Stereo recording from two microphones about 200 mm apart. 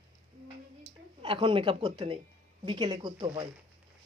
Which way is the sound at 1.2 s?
25° right (ahead or behind).